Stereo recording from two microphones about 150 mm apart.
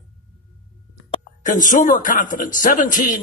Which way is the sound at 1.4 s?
60° left (ahead or behind).